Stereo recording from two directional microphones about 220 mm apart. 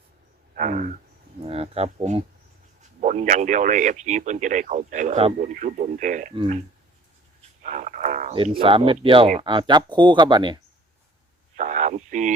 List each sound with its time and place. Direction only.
0.5 s speech: 35° right (ahead or behind)
6.3 s speech: 25° right (ahead or behind)
7.6 s radio: 35° right (ahead or behind)
8.3 s speech: 25° right (ahead or behind)
11.5 s radio: 35° right (ahead or behind)